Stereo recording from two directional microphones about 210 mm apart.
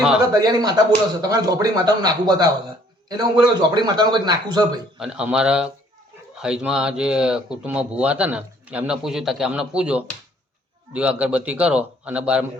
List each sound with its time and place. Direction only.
0.3 s speech: 15° right (ahead or behind)
4.9 s speech: 5° right (ahead or behind)